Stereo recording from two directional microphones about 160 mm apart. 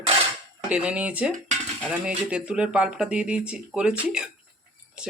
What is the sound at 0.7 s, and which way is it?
Speech, 5° right (ahead or behind).